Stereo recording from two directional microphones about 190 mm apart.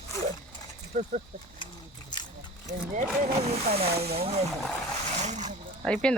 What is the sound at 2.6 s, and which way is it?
Speech, 40° right (ahead or behind).